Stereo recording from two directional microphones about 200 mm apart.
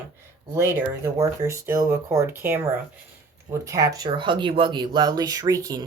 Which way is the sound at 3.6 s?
15° right (ahead or behind).